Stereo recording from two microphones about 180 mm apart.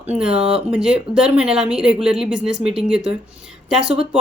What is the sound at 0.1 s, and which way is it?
A woman's voice, 5° right (ahead or behind).